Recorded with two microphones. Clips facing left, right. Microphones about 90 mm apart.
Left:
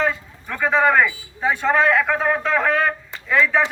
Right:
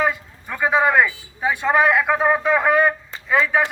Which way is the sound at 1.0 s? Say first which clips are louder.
Left 1 dB; 10° right (ahead or behind).